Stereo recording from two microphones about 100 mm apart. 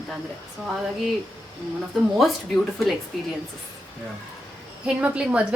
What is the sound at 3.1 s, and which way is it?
Speech, centre (ahead or behind).